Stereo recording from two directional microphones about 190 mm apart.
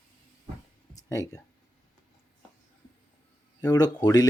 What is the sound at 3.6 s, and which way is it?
Speech, 20° left (ahead or behind).